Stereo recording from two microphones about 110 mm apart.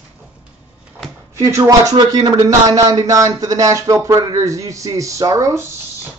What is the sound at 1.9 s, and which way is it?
Speech, 40° right (ahead or behind).